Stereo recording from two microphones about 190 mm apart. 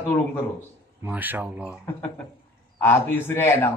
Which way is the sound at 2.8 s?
10° left (ahead or behind).